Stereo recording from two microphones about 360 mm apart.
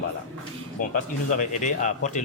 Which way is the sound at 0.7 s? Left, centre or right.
Left.